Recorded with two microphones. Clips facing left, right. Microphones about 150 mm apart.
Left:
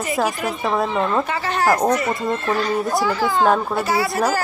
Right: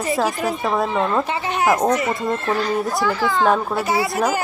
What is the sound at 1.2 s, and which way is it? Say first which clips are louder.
Speech: even; 25° right (ahead or behind).